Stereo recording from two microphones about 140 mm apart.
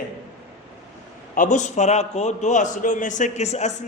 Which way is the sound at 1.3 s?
60° left (ahead or behind).